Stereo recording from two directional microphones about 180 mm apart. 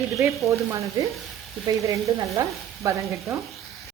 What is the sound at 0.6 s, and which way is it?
Sizzle, 15° right (ahead or behind).